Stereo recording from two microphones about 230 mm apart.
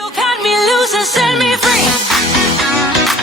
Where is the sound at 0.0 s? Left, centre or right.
Centre.